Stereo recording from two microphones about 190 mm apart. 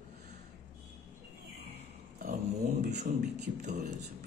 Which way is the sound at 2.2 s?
40° right (ahead or behind).